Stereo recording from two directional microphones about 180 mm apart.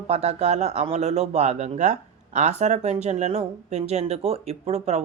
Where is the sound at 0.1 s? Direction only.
35° right (ahead or behind).